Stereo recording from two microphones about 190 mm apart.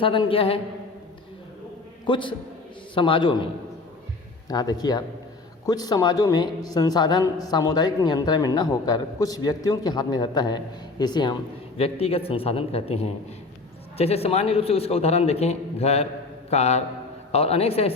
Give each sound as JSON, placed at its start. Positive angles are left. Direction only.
{"t": 0.0, "sound": "a woman's voice", "side_deg": 30}
{"t": 2.0, "sound": "a woman's voice", "side_deg": 25}